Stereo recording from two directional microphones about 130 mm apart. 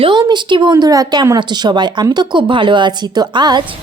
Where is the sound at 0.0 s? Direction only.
35° right (ahead or behind).